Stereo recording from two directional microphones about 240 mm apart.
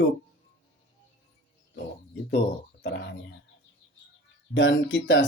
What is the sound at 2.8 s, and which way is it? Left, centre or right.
Speech, left.